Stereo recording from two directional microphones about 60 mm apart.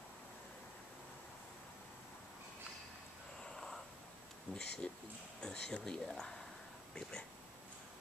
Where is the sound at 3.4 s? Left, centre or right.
Centre.